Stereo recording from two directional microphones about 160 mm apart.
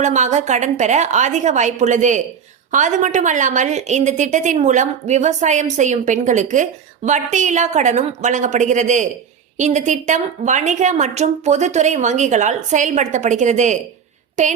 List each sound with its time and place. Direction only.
0.0 s a woman's voice: 50° right (ahead or behind)